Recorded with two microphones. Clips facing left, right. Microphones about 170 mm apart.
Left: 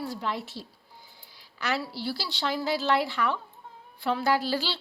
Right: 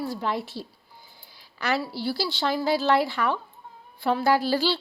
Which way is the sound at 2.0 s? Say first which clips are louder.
Right 5 dB; 45° right (ahead or behind).